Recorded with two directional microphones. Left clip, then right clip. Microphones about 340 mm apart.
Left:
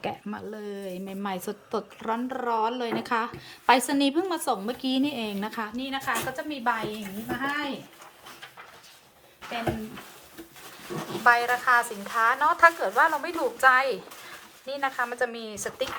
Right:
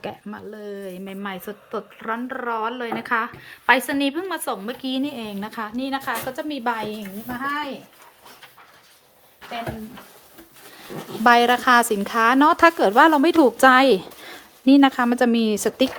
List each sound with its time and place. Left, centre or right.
0.0 s a woman's voice: centre; by 6.8 s right
11.3 s a woman's voice: right